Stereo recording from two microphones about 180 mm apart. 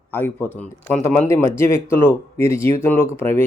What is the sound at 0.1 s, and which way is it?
Speech, 10° left (ahead or behind).